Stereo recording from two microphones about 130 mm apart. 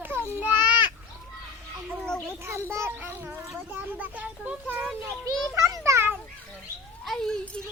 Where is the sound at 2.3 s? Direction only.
20° right (ahead or behind).